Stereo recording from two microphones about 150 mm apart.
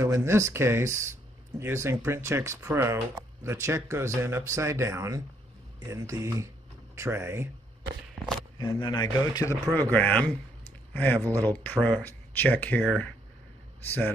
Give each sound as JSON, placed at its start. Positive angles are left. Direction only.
{"t": 0.0, "sound": "speech", "side_deg": -15}
{"t": 8.5, "sound": "a man's voice", "side_deg": 30}
{"t": 9.8, "sound": "speech", "side_deg": 10}